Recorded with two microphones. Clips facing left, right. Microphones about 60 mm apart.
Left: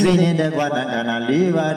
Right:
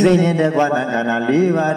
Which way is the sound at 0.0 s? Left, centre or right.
Right.